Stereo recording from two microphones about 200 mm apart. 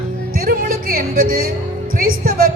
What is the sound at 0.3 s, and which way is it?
Music, 45° right (ahead or behind).